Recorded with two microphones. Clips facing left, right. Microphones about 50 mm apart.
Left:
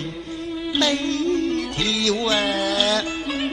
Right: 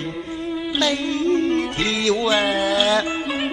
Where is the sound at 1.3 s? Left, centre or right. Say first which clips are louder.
Right 3 dB; right.